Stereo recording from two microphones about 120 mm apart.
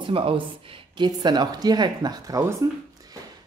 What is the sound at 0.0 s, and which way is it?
Speech, 50° right (ahead or behind).